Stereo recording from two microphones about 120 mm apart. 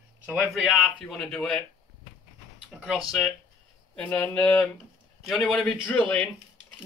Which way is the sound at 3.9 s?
15° left (ahead or behind).